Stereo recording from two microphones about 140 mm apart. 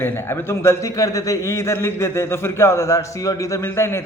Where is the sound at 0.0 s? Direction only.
15° left (ahead or behind).